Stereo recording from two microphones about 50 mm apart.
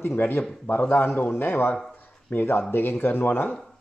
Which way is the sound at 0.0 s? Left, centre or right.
Left.